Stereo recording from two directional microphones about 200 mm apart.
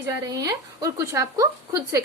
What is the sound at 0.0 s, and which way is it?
A woman's voice, 15° right (ahead or behind).